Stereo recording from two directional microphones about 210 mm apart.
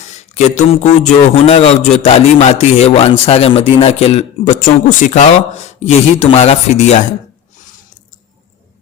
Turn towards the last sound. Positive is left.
turn(degrees=30)  # may be behind; listen again after turning